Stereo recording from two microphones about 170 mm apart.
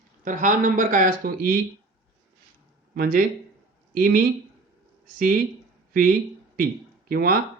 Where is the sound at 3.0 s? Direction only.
55° right (ahead or behind).